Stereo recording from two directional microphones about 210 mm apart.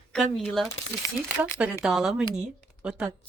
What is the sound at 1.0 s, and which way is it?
Speech, 15° left (ahead or behind).